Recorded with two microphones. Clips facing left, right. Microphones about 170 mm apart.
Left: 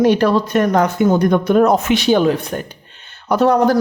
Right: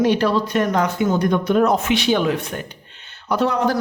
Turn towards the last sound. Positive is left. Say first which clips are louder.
# left 6 dB
turn(degrees=45)  # may be behind; listen again after turning